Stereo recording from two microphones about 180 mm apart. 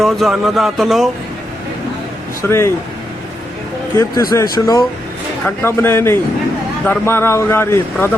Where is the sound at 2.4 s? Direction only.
15° left (ahead or behind).